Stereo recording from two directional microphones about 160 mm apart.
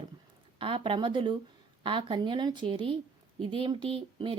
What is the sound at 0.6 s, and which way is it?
Speech, 30° right (ahead or behind).